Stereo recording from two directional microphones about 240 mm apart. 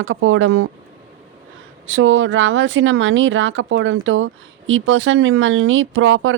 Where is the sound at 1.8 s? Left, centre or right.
Right.